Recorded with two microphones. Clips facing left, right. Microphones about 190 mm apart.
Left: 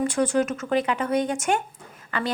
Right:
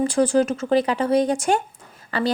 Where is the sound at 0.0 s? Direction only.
30° right (ahead or behind).